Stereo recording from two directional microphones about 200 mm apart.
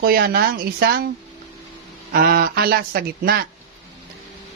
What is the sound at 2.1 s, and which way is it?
A man's voice, 50° right (ahead or behind).